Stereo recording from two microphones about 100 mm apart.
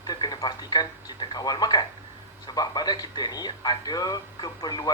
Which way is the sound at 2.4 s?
45° left (ahead or behind).